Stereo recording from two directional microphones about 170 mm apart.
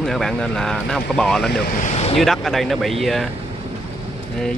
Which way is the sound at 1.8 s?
40° left (ahead or behind).